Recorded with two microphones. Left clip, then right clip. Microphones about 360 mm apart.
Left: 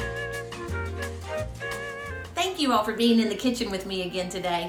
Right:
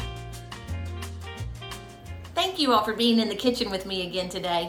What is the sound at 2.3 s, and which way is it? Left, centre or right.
A woman's voice, centre.